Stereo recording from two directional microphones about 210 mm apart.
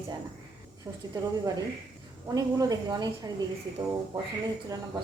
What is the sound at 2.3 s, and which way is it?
A woman's voice, 15° right (ahead or behind).